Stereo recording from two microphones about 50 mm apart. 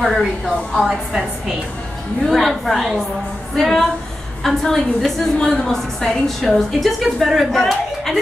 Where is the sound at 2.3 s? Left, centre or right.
Centre.